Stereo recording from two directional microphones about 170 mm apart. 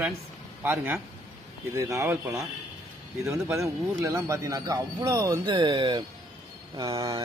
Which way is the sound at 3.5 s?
15° right (ahead or behind).